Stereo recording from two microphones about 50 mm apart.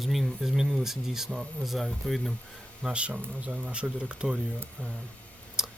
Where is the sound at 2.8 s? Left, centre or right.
Right.